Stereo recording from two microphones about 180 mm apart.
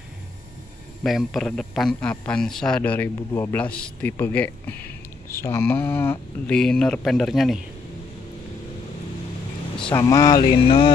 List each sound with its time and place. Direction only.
1.0 s a man's voice: centre (ahead or behind)
9.8 s speech: 5° left (ahead or behind)
10.0 s a sound: 20° left (ahead or behind)